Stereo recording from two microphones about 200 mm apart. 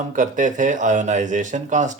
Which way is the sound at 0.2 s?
40° right (ahead or behind).